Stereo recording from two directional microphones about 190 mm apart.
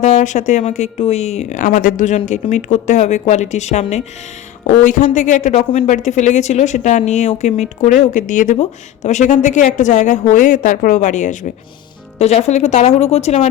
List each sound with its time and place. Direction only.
0.0 s a woman's voice: 40° left (ahead or behind)